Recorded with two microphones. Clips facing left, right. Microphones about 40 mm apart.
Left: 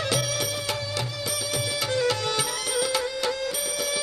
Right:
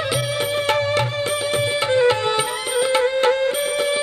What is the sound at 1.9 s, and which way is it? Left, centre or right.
Music, right.